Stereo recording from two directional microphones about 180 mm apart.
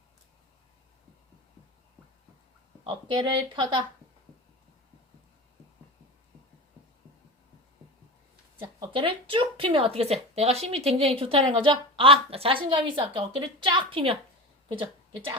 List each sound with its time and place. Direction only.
2.8 s speech: 25° right (ahead or behind)
8.9 s speech: 30° right (ahead or behind)